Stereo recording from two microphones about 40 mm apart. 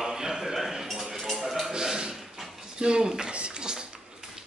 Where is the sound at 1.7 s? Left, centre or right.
Centre.